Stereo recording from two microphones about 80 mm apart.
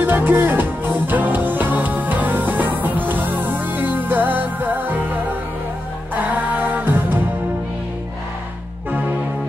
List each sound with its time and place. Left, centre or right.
0.0 s music: right